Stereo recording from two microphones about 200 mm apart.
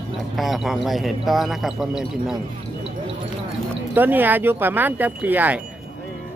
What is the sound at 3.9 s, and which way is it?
Speech, 10° right (ahead or behind).